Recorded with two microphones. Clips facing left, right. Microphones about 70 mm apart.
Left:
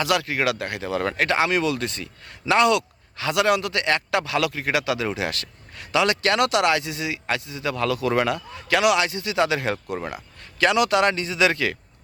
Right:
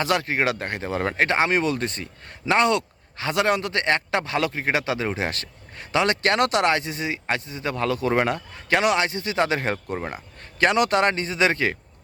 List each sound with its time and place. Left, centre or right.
0.0 s speech: right